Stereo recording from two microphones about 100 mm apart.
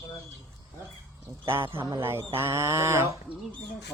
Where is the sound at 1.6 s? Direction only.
55° right (ahead or behind).